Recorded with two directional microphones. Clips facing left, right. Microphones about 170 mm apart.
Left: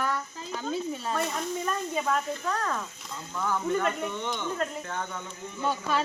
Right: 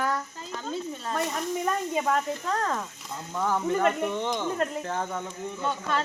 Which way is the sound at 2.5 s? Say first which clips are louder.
Right 2 dB; 30° right (ahead or behind).